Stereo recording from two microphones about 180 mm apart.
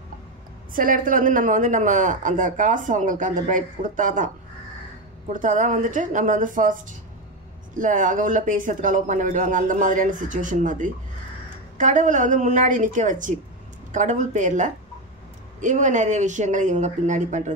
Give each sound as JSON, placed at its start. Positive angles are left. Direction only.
{"t": 0.7, "sound": "speech", "side_deg": -50}
{"t": 5.3, "sound": "speech", "side_deg": -45}